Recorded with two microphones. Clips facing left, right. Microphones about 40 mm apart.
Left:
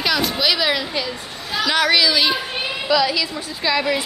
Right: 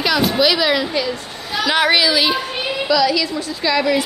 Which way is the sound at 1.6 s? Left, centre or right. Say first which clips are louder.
Right 2 dB; centre.